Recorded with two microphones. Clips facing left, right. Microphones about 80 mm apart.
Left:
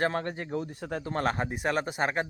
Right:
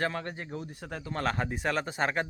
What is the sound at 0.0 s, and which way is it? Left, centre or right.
Speech, left.